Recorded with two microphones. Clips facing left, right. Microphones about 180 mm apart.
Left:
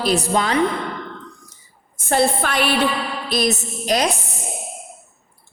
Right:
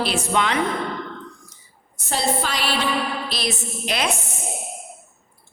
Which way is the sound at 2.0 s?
55° left (ahead or behind).